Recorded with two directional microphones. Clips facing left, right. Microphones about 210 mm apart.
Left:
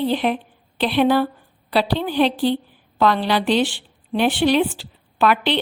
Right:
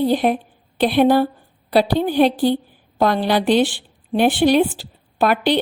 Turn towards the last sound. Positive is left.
turn(degrees=-45)  # may be behind; listen again after turning